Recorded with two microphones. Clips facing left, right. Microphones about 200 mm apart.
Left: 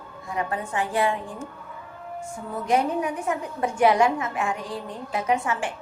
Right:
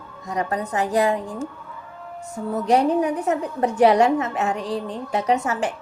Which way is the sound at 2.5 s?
40° right (ahead or behind).